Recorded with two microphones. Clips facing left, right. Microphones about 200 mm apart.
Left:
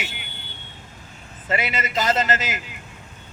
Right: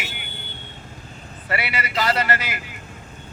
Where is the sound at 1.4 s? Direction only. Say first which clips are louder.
Left 2 dB; 20° left (ahead or behind).